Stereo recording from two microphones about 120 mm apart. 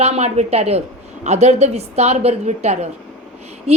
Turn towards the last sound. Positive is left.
turn(degrees=-60)  # may be behind; listen again after turning